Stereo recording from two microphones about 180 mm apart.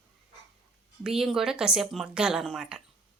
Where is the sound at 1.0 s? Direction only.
5° right (ahead or behind).